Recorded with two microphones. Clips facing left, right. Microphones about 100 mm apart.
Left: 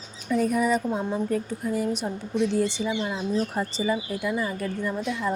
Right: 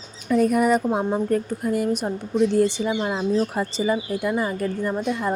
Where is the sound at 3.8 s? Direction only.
50° right (ahead or behind).